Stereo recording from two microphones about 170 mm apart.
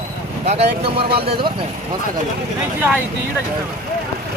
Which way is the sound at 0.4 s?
40° right (ahead or behind).